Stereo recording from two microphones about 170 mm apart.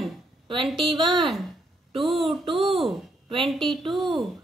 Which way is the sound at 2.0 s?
Centre (ahead or behind).